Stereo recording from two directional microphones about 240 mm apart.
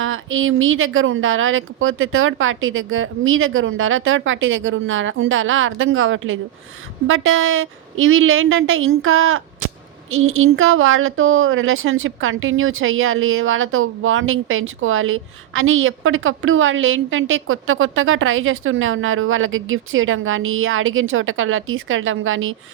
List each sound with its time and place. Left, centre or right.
0.0 s speech: right